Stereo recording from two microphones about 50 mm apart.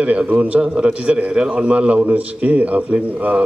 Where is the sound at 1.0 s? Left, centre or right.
Right.